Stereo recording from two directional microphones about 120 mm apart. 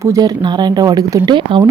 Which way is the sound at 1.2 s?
45° right (ahead or behind).